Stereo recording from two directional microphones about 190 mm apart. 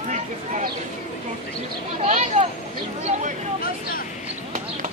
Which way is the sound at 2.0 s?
40° right (ahead or behind).